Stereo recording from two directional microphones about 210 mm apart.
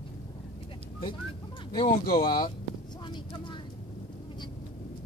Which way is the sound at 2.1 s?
45° left (ahead or behind).